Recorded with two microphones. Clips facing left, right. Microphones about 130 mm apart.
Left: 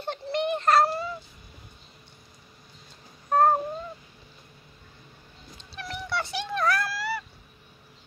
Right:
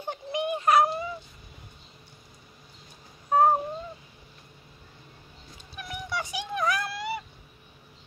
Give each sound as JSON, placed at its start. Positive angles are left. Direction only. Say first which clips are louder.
{"t": 0.0, "sound": "a sound", "louder": "left 2 dB", "side_deg": -15}
{"t": 3.3, "sound": "cat", "louder": "even", "side_deg": -10}
{"t": 5.6, "sound": "cat", "louder": "left 2 dB", "side_deg": -15}